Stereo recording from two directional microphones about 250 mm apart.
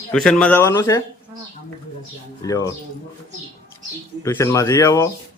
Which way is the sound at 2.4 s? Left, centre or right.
Centre.